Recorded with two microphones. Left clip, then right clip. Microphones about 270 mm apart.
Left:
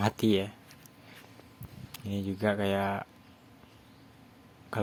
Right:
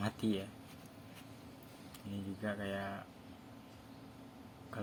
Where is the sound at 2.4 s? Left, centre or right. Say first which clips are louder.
Left 12 dB; left.